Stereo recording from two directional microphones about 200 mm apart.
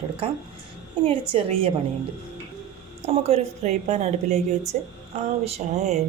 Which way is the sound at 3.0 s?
30° right (ahead or behind).